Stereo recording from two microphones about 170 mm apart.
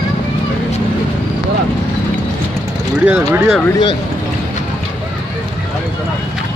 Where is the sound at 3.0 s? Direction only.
10° right (ahead or behind).